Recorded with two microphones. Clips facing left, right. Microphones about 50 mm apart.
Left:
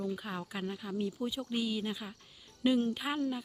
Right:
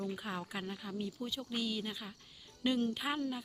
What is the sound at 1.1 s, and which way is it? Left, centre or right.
Speech, centre.